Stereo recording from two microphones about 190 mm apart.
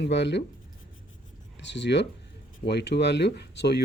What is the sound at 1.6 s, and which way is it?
Speech, 65° left (ahead or behind).